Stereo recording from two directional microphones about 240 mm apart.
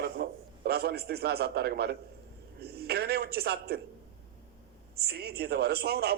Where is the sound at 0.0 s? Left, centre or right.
Right.